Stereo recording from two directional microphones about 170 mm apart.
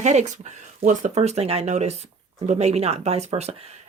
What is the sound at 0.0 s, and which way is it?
Speech, 45° right (ahead or behind).